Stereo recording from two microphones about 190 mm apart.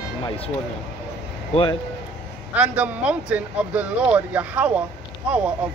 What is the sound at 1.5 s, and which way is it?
Speech, 25° left (ahead or behind).